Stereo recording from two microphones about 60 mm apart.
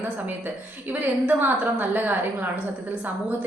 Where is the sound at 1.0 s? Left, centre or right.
Right.